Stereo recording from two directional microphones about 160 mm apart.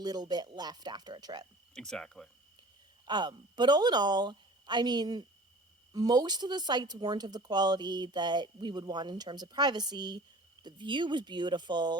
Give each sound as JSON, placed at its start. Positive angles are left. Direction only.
{"t": 0.0, "sound": "speech", "side_deg": -25}
{"t": 1.7, "sound": "speech", "side_deg": 5}
{"t": 3.1, "sound": "speech", "side_deg": -30}